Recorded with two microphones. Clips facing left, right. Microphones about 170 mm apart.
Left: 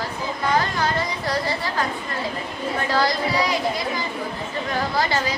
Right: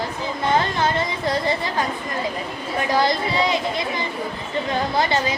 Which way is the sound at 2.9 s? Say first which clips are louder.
Right 2 dB; 20° right (ahead or behind).